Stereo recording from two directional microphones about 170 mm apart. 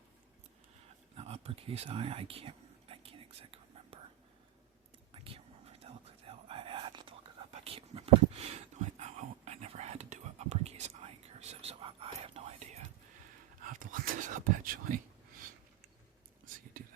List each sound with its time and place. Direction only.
1.1 s a sound: 35° right (ahead or behind)
5.1 s whispering: 30° right (ahead or behind)
13.7 s whispering: 50° right (ahead or behind)